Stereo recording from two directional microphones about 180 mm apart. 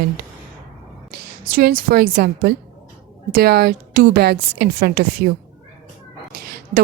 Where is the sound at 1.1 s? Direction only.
55° right (ahead or behind).